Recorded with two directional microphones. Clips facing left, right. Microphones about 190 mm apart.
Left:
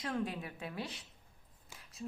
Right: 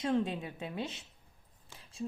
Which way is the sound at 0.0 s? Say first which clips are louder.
Right 6 dB; 25° right (ahead or behind).